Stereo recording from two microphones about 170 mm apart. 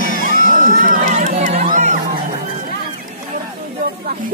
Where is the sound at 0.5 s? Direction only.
50° right (ahead or behind).